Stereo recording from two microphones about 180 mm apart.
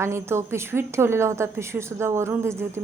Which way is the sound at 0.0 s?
15° right (ahead or behind).